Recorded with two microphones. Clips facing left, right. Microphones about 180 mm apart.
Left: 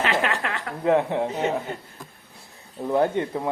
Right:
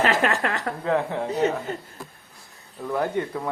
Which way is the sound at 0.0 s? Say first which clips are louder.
Right 2 dB; 45° right (ahead or behind).